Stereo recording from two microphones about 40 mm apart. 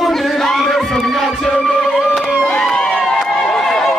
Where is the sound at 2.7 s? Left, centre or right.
Centre.